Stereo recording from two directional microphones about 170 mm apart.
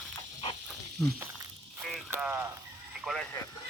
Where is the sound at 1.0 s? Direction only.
15° left (ahead or behind).